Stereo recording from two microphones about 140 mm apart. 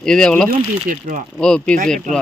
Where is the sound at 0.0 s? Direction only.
5° left (ahead or behind).